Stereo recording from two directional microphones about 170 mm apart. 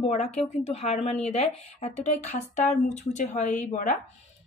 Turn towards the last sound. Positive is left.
turn(degrees=45)  # may be behind; listen again after turning